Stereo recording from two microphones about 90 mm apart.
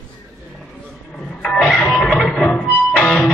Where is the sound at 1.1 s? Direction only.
10° left (ahead or behind).